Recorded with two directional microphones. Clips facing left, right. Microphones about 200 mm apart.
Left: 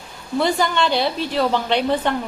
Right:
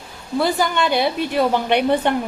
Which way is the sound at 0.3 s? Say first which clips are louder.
Even; 5° right (ahead or behind).